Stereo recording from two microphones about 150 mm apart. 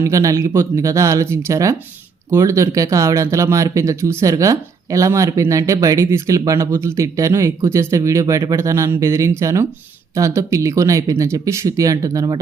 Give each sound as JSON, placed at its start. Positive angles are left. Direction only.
{"t": 0.0, "sound": "speech", "side_deg": -20}